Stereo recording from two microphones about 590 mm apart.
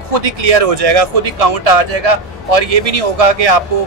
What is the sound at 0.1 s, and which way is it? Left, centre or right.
Speech, right.